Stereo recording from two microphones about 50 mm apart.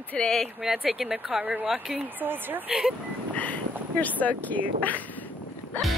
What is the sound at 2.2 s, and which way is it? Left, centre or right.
Speech, right.